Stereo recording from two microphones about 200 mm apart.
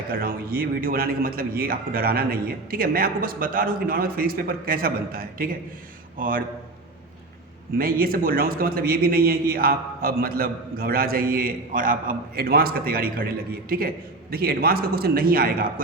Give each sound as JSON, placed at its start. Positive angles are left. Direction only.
{"t": 0.1, "sound": "a man's voice", "side_deg": -50}
{"t": 7.8, "sound": "a man's voice", "side_deg": -45}